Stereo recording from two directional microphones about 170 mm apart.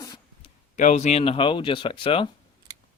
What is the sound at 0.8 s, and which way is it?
Speech, 45° left (ahead or behind).